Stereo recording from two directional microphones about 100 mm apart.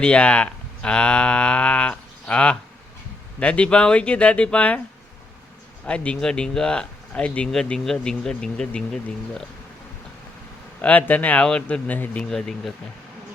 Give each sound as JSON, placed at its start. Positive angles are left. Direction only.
{"t": 0.0, "sound": "speech", "side_deg": 10}
{"t": 5.8, "sound": "speech", "side_deg": 10}
{"t": 10.8, "sound": "speech", "side_deg": 15}
{"t": 12.3, "sound": "speech", "side_deg": 5}